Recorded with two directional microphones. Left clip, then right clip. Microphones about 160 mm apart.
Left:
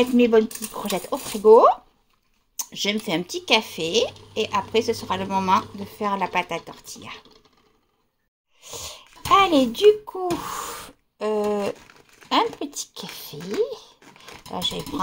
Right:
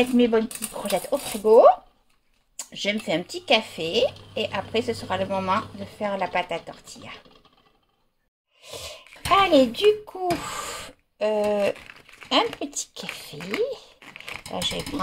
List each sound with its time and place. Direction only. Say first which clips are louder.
0.0 s speech: left 3 dB; 20° left (ahead or behind)
8.6 s a child's voice: left 1 dB; 5° left (ahead or behind)